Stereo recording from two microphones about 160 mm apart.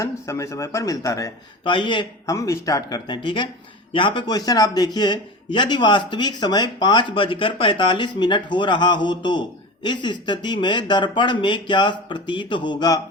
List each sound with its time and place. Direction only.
0.0 s a man's voice: 20° left (ahead or behind)